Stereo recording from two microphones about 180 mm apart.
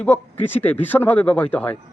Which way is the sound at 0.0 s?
10° left (ahead or behind).